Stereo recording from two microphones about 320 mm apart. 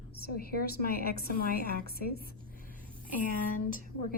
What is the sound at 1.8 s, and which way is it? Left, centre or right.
Speech, left.